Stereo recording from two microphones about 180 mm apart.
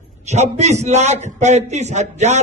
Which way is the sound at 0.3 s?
40° right (ahead or behind).